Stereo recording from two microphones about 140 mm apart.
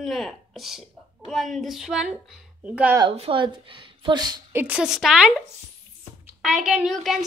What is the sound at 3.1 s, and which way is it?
A woman's voice, 40° right (ahead or behind).